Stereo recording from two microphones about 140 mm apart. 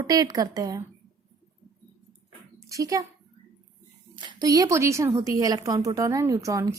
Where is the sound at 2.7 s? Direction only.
25° right (ahead or behind).